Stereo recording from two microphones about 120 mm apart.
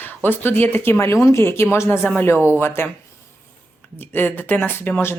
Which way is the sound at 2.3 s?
15° right (ahead or behind).